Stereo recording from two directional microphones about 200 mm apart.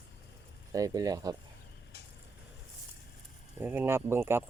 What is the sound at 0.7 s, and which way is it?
Speech, 15° right (ahead or behind).